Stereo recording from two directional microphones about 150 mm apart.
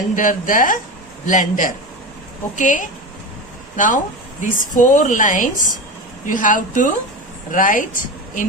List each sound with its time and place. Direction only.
0.2 s speech: 65° left (ahead or behind)